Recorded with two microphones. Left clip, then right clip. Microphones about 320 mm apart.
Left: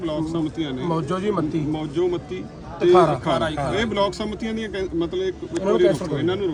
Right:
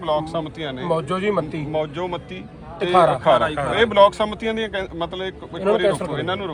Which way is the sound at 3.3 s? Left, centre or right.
Centre.